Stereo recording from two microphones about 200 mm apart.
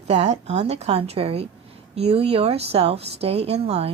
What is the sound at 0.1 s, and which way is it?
Speech, 30° right (ahead or behind).